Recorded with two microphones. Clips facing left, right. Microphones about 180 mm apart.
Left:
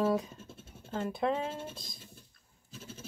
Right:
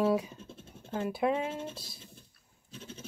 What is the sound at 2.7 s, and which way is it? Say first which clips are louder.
Goat: right 2 dB; 5° left (ahead or behind).